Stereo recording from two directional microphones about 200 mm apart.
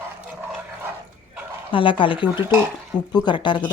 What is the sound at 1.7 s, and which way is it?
A woman's voice, 25° left (ahead or behind).